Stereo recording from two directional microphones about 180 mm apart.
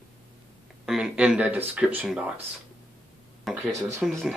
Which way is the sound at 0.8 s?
5° right (ahead or behind).